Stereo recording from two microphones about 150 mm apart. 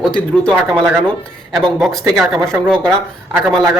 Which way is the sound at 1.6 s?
Centre (ahead or behind).